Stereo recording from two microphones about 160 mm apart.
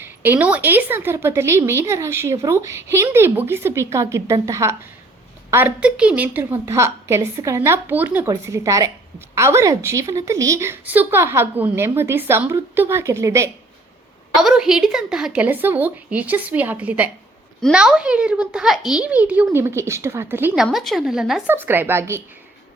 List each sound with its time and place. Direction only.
0.0 s a woman's voice: 10° right (ahead or behind)
14.4 s a woman's voice: 5° right (ahead or behind)
20.7 s a child's voice: centre (ahead or behind); by 22.2 s 15° right (ahead or behind)